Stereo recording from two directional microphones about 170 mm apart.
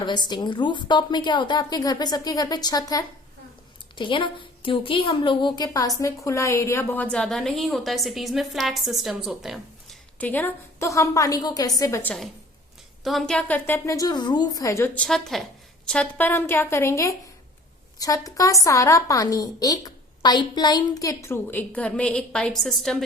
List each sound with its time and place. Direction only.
0.0 s a woman's voice: 25° left (ahead or behind); by 10.0 s centre (ahead or behind)
10.2 s a woman's voice: 10° left (ahead or behind)
13.1 s a woman's voice: centre (ahead or behind)